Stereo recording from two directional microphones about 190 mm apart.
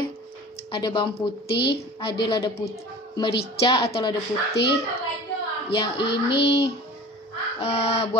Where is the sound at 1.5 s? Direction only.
60° left (ahead or behind).